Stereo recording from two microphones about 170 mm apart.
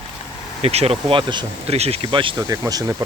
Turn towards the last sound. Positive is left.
turn(degrees=-20)  # may be behind; listen again after turning